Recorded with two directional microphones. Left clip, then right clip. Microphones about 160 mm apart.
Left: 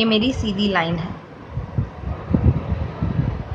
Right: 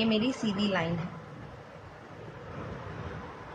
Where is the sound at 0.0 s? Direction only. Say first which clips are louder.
Left 10 dB; 10° left (ahead or behind).